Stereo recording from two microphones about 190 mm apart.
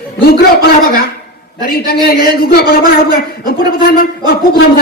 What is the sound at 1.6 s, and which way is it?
A woman's voice, 50° left (ahead or behind).